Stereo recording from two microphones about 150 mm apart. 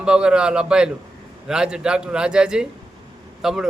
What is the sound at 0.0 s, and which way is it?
Speech, 5° right (ahead or behind).